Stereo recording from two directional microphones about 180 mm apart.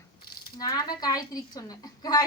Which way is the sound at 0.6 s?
20° left (ahead or behind).